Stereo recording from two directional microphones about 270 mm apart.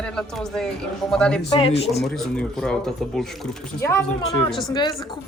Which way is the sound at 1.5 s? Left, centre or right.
Left.